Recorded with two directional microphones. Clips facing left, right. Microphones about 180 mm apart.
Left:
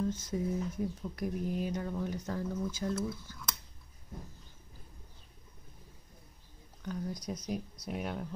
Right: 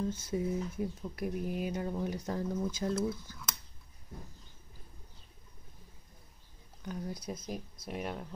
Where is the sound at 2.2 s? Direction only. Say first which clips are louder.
Right 1 dB; 30° right (ahead or behind).